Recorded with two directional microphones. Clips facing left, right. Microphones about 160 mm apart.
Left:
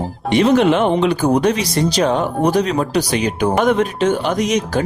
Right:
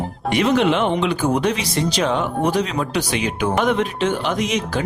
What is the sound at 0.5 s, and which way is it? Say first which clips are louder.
Speech: left 4 dB; 45° left (ahead or behind).